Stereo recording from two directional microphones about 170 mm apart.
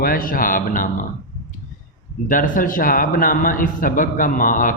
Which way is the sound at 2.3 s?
50° left (ahead or behind).